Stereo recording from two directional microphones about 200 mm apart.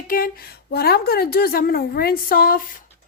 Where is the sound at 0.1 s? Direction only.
45° left (ahead or behind).